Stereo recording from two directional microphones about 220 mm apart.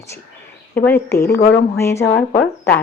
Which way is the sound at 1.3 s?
45° left (ahead or behind).